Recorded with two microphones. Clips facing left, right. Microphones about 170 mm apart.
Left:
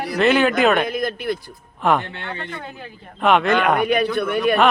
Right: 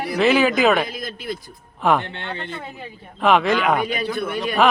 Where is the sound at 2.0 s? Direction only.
20° right (ahead or behind).